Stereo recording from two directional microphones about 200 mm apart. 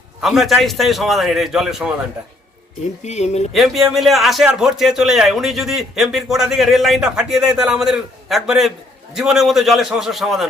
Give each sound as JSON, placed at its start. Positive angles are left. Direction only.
{"t": 0.2, "sound": "speech", "side_deg": 0}
{"t": 3.0, "sound": "speech", "side_deg": 35}
{"t": 3.5, "sound": "speech", "side_deg": 0}